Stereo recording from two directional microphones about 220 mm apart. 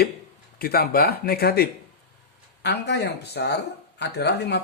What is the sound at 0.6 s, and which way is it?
Speech, 45° left (ahead or behind).